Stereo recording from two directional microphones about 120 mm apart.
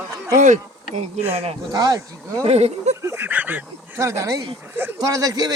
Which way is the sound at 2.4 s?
60° right (ahead or behind).